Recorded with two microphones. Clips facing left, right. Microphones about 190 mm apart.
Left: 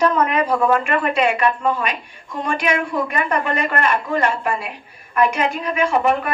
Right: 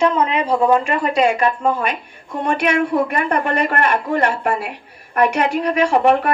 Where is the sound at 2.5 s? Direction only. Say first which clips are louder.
Right 4 dB; 60° right (ahead or behind).